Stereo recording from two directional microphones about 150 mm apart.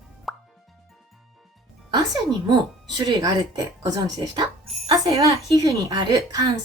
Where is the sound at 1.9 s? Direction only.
25° right (ahead or behind).